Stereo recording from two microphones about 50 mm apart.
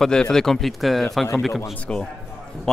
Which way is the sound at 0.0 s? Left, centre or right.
Centre.